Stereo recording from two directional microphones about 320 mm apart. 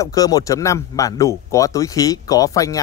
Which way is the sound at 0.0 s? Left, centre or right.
Centre.